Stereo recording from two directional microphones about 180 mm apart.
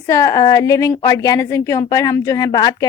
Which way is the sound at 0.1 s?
20° left (ahead or behind).